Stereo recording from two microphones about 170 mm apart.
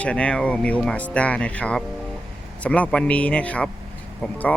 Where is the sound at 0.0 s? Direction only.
5° left (ahead or behind).